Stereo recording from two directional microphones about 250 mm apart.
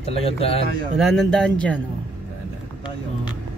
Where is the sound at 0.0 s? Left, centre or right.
Left.